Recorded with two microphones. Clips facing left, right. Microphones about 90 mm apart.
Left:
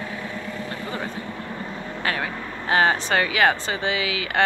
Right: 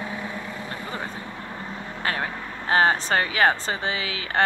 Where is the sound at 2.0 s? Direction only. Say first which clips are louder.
Left 1 dB; 35° right (ahead or behind).